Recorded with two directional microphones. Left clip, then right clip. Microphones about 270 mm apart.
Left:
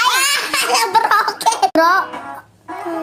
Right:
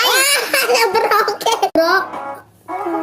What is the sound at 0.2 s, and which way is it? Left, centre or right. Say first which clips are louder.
Belly laugh: right 1 dB; left.